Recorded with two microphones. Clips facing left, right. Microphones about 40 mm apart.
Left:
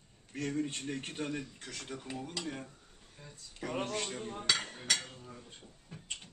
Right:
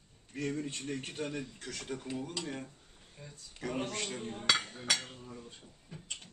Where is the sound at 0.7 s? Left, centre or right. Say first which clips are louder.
Even; left.